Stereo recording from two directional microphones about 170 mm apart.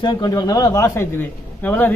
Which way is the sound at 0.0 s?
25° left (ahead or behind).